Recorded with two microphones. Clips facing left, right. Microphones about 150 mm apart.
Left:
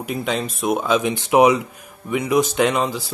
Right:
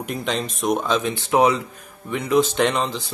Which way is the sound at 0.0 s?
5° left (ahead or behind).